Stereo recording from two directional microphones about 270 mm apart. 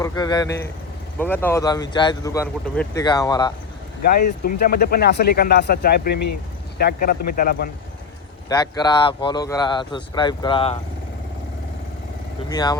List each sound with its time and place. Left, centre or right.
0.0 s speech: centre
4.4 s speech: left
8.4 s speech: centre
12.5 s speech: centre